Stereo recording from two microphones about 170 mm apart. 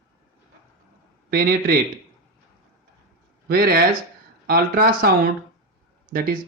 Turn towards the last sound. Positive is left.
turn(degrees=-60)  # may be behind; listen again after turning